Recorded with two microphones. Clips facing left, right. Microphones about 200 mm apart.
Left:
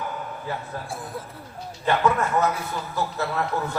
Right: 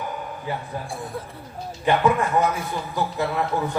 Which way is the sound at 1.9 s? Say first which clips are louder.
Right 2 dB; 15° right (ahead or behind).